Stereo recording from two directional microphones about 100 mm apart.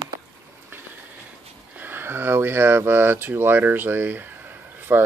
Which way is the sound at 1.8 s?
20° right (ahead or behind).